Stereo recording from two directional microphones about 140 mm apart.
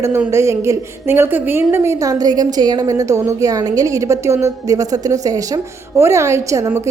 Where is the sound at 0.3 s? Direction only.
20° right (ahead or behind).